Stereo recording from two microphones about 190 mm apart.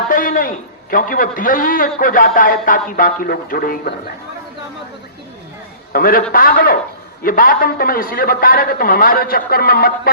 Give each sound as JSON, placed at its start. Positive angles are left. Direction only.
{"t": 0.1, "sound": "a man's voice", "side_deg": 45}
{"t": 5.9, "sound": "a man's voice", "side_deg": 50}